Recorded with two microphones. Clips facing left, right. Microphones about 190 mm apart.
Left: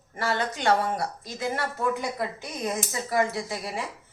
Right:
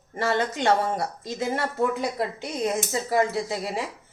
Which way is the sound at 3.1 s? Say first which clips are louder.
Right 2 dB; 25° right (ahead or behind).